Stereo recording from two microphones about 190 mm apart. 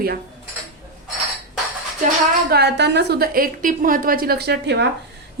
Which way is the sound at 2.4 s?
60° right (ahead or behind).